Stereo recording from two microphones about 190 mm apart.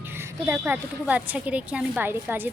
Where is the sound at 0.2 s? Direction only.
15° right (ahead or behind).